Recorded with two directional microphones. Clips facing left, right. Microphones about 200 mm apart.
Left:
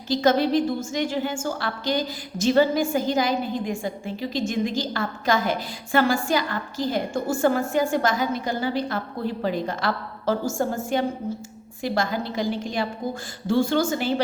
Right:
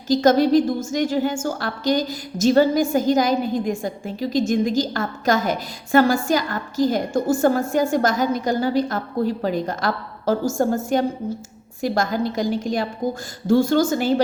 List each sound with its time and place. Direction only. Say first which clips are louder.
0.1 s a woman's voice: right 5 dB; 45° right (ahead or behind)